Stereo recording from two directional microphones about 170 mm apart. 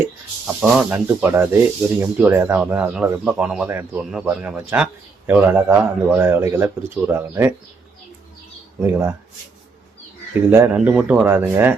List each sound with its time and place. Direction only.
0.4 s speech: 5° right (ahead or behind)
8.8 s speech: 15° right (ahead or behind)
10.5 s speech: 10° right (ahead or behind)